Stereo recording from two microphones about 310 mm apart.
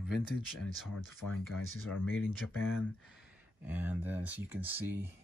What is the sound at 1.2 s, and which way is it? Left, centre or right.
Speech, left.